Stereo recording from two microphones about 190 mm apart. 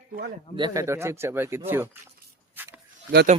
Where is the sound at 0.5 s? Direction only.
20° right (ahead or behind).